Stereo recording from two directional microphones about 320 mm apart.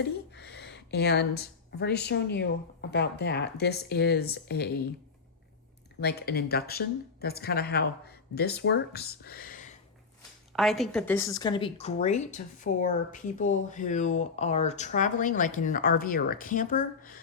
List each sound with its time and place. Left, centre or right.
0.0 s speech: left
6.0 s a woman's voice: left
10.5 s a woman's voice: centre; by 17.1 s left